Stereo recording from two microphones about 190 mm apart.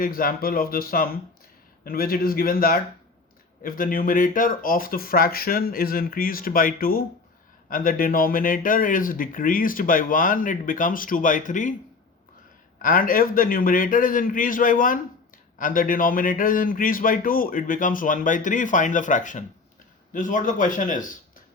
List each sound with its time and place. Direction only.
0.0 s speech: 50° left (ahead or behind)
12.8 s speech: 50° left (ahead or behind)